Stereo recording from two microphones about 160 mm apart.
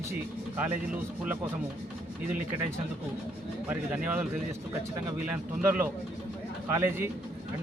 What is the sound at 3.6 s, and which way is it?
Speech, 10° right (ahead or behind).